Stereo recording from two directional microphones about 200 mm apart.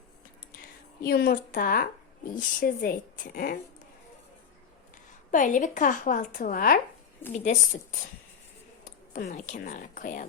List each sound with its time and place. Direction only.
1.0 s speech: 50° left (ahead or behind)
5.3 s a woman's voice: 40° left (ahead or behind)